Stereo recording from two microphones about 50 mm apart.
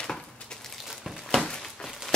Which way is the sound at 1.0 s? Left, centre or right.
Centre.